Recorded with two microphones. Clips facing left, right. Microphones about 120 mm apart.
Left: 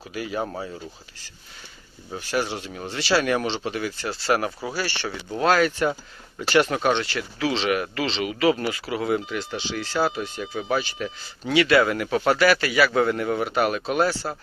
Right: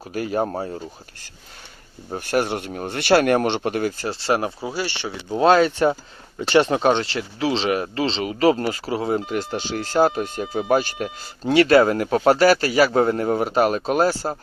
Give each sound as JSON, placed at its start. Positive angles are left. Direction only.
{"t": 0.1, "sound": "speech", "side_deg": -45}
{"t": 2.1, "sound": "speech", "side_deg": -50}